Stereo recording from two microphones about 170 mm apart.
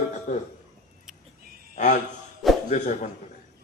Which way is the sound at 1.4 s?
60° right (ahead or behind).